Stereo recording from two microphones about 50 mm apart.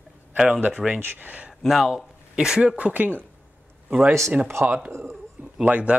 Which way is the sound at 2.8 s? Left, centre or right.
Right.